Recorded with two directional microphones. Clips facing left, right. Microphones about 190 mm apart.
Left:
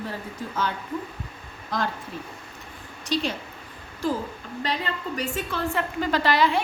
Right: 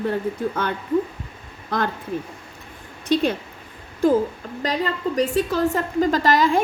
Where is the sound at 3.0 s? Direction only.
55° right (ahead or behind).